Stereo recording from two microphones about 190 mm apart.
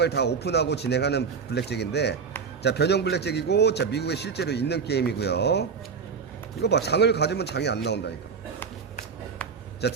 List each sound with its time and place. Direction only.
0.0 s a man's voice: 60° left (ahead or behind)
9.8 s a man's voice: 60° left (ahead or behind)